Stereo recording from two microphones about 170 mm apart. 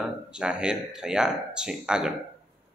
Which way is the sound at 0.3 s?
5° right (ahead or behind).